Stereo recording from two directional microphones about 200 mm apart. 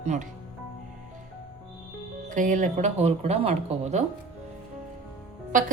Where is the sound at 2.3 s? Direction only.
40° right (ahead or behind).